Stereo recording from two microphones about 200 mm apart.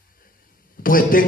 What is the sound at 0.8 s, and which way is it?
Speech, 45° left (ahead or behind).